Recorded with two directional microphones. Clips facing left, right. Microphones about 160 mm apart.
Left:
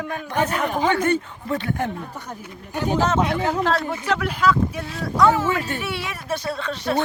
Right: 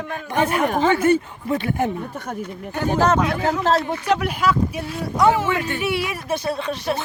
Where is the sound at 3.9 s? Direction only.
15° right (ahead or behind).